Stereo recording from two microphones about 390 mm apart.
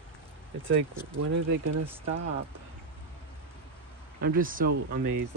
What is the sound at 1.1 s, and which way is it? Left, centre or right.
Speech, right.